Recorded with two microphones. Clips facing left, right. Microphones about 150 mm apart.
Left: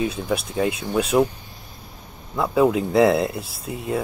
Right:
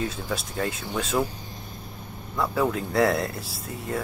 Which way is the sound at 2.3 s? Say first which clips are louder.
Left 6 dB; 20° left (ahead or behind).